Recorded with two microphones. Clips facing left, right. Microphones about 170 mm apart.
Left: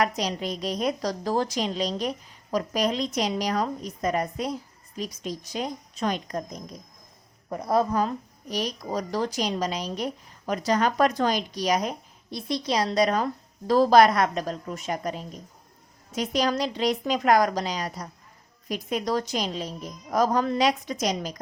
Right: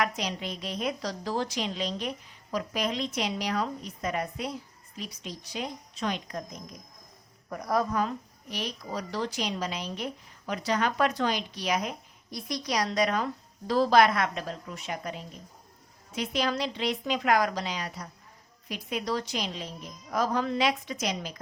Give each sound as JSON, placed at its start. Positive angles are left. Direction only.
{"t": 0.0, "sound": "a woman's voice", "side_deg": 40}
{"t": 7.5, "sound": "speech", "side_deg": 25}